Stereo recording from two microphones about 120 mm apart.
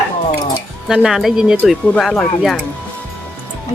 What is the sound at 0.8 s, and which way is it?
Speech, 5° right (ahead or behind).